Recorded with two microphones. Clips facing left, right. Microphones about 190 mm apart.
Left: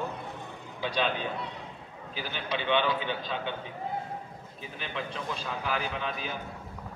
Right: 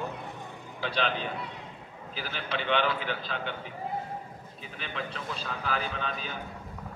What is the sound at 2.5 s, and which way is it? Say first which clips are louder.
Speech: left 1 dB; 15° left (ahead or behind).